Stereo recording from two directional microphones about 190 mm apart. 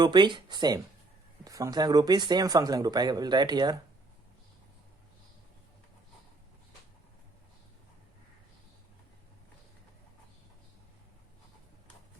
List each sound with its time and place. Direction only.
0.0 s speech: 25° right (ahead or behind)